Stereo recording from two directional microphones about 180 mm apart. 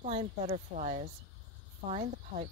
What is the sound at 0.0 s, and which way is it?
Speech, 40° right (ahead or behind).